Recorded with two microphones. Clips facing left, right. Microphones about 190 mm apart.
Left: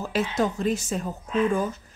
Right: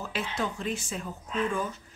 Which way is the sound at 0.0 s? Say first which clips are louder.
Left 7 dB; 40° left (ahead or behind).